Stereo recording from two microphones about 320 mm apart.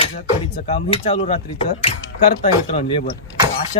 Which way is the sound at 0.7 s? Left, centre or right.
Centre.